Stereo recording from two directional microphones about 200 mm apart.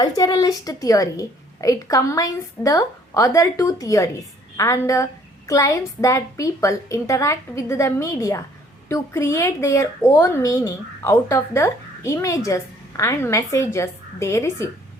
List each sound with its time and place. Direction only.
0.0 s a woman's voice: 20° left (ahead or behind)